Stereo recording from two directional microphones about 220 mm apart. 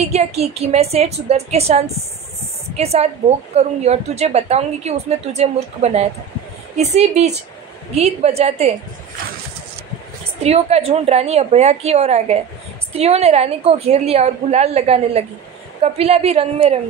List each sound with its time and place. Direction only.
0.0 s a woman's voice: 30° right (ahead or behind)
10.4 s a woman's voice: 30° right (ahead or behind)